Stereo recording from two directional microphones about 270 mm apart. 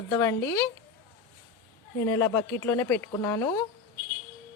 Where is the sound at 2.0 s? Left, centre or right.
Centre.